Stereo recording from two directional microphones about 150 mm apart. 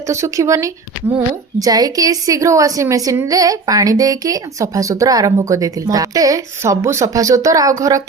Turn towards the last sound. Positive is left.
turn(degrees=-20)  # may be behind; listen again after turning